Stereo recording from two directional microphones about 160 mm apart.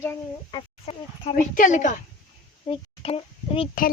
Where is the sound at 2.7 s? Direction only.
35° left (ahead or behind).